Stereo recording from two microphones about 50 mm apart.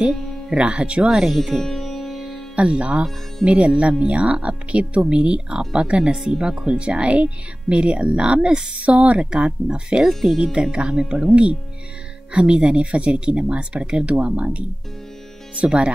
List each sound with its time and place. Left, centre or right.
0.5 s speech: right
1.0 s speech: centre
1.3 s music: centre
2.5 s speech: right
6.3 s speech: centre
6.6 s speech: centre